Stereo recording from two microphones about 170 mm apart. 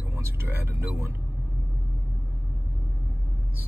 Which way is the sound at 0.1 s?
15° right (ahead or behind).